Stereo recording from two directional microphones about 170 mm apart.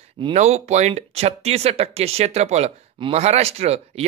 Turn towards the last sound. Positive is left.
turn(degrees=-40)  # may be behind; listen again after turning